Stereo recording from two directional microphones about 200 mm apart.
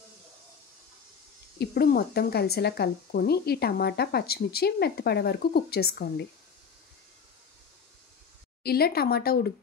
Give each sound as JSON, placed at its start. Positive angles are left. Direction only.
{"t": 1.6, "sound": "speech", "side_deg": 50}
{"t": 8.6, "sound": "speech", "side_deg": 50}